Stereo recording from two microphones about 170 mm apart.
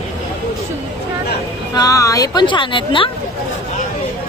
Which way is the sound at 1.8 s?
20° left (ahead or behind).